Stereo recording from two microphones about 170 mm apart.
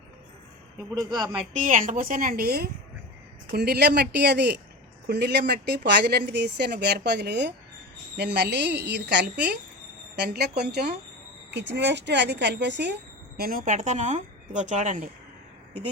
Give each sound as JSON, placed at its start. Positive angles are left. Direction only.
{"t": 0.9, "sound": "a man's voice", "side_deg": -25}
{"t": 1.5, "sound": "a woman's voice", "side_deg": -50}
{"t": 10.2, "sound": "speech", "side_deg": -70}
{"t": 11.5, "sound": "speech", "side_deg": -90}